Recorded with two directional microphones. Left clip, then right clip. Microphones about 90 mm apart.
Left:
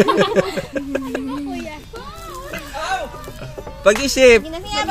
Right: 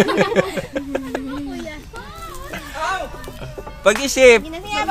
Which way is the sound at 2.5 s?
15° right (ahead or behind).